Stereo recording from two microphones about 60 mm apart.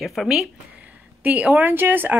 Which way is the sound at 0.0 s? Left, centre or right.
Centre.